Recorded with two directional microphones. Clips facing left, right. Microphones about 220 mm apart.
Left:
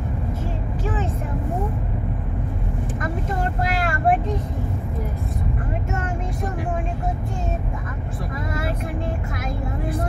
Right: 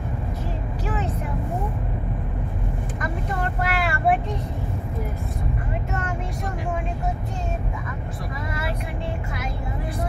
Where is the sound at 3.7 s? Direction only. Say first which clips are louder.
Left 1 dB; 40° left (ahead or behind).